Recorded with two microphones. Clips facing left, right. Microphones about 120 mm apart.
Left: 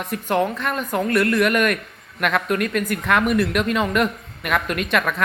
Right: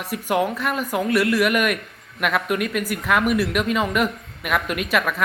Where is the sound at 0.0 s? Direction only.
5° right (ahead or behind).